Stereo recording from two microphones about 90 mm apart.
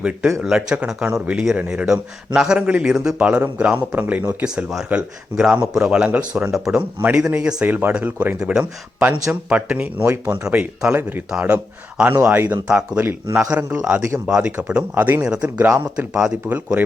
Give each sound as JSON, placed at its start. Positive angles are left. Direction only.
{"t": 0.4, "sound": "speech", "side_deg": -5}
{"t": 4.4, "sound": "speech", "side_deg": -10}
{"t": 15.4, "sound": "speech", "side_deg": -25}
{"t": 16.0, "sound": "speech", "side_deg": -10}